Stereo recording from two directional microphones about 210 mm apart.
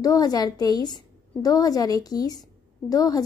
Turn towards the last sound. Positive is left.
turn(degrees=15)  # may be behind; listen again after turning